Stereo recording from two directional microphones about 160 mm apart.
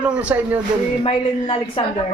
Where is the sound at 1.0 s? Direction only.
35° left (ahead or behind).